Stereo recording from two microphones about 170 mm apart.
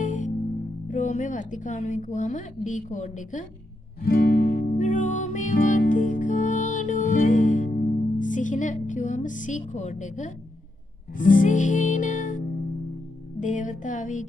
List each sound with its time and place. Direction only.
0.0 s music: 50° left (ahead or behind)
0.8 s speech: 45° left (ahead or behind)
4.0 s music: 60° left (ahead or behind)
13.4 s speech: 50° left (ahead or behind)